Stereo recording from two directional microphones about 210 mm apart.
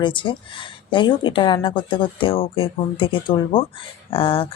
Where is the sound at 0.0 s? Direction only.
25° left (ahead or behind).